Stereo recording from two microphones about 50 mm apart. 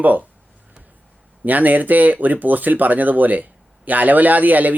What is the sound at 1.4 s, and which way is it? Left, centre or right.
Speech, right.